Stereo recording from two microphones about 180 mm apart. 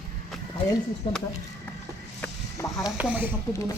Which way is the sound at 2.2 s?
15° left (ahead or behind).